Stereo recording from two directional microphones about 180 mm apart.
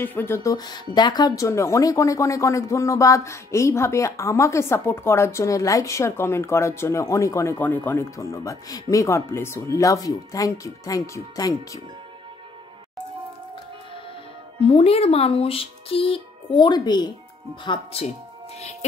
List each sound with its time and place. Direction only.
0.0 s a woman's voice: 10° left (ahead or behind)
14.6 s speech: 35° left (ahead or behind)
17.6 s speech: 35° left (ahead or behind)